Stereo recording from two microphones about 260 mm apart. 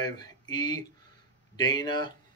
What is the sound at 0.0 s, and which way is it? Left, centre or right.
Speech, centre.